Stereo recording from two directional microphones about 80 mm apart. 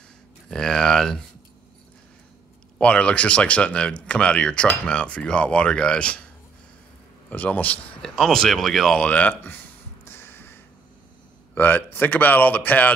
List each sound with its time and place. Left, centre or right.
0.5 s speech: centre
2.8 s speech: centre
7.2 s speech: centre
8.0 s speech: centre; by 9.6 s left
10.0 s a sound: left
11.5 s speech: left